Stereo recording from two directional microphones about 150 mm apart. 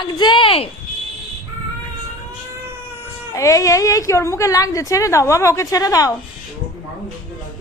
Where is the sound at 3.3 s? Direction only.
20° left (ahead or behind).